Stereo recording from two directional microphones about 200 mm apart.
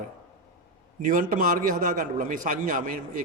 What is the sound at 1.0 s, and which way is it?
A man's voice, 45° right (ahead or behind).